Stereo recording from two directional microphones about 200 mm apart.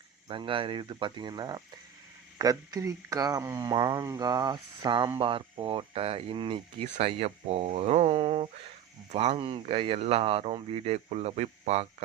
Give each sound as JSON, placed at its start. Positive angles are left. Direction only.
{"t": 0.3, "sound": "speech", "side_deg": -25}